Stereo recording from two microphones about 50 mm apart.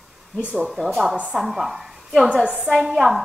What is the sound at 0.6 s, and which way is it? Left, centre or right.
Speech, centre.